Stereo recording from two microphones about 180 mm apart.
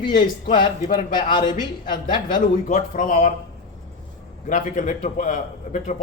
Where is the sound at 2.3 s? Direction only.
45° left (ahead or behind).